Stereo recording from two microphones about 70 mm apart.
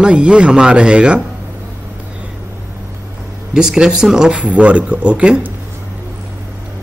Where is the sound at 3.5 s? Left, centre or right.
Centre.